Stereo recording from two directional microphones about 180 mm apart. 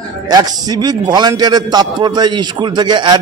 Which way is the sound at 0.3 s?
20° right (ahead or behind).